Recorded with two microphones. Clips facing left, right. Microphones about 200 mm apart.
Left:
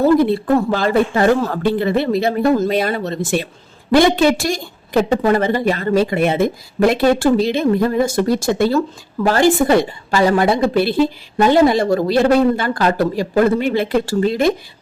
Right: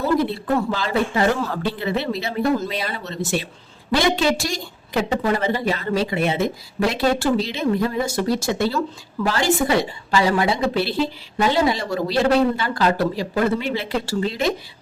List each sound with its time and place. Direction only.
0.2 s a woman's voice: 50° left (ahead or behind)